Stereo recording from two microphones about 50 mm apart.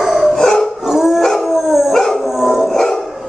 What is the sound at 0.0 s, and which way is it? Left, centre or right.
Dog, centre.